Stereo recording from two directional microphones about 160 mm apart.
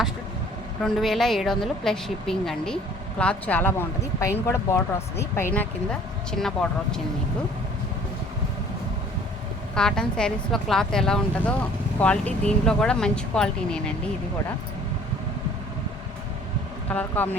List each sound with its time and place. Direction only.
0.8 s speech: centre (ahead or behind)
5.5 s speech: 5° left (ahead or behind)
9.7 s speech: 5° left (ahead or behind)
16.9 s speech: 10° left (ahead or behind)